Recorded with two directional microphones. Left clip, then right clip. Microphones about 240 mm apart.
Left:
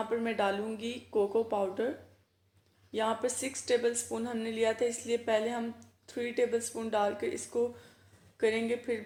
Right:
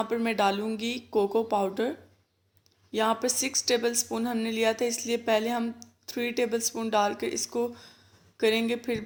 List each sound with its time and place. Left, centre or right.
0.0 s speech: right
2.9 s speech: right